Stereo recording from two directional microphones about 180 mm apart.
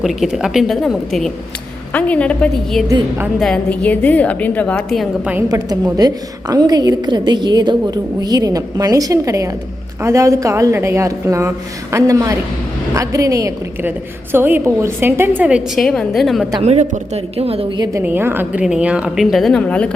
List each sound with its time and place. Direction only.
0.0 s a woman's voice: centre (ahead or behind)
5.5 s a woman's voice: 20° right (ahead or behind); by 16.5 s centre (ahead or behind)
16.6 s a woman's voice: 40° right (ahead or behind)
18.0 s a woman's voice: 10° right (ahead or behind); by 19.9 s 5° left (ahead or behind)